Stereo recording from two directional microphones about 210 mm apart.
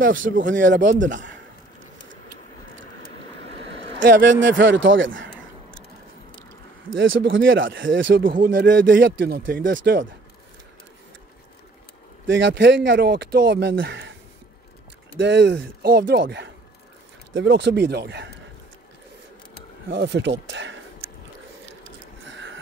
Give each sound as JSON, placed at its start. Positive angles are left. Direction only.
{"t": 0.0, "sound": "speech", "side_deg": -65}
{"t": 0.9, "sound": "a man's voice", "side_deg": -40}
{"t": 4.0, "sound": "a man's voice", "side_deg": -40}
{"t": 4.6, "sound": "speech", "side_deg": -65}
{"t": 6.9, "sound": "speech", "side_deg": -65}
{"t": 8.2, "sound": "a man's voice", "side_deg": -40}
{"t": 9.0, "sound": "speech", "side_deg": -55}
{"t": 12.3, "sound": "speech", "side_deg": -60}
{"t": 15.1, "sound": "speech", "side_deg": -60}
{"t": 19.9, "sound": "speech", "side_deg": -55}
{"t": 22.3, "sound": "a sound", "side_deg": -60}